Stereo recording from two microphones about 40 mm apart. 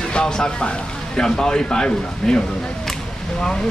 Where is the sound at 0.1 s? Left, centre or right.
Left.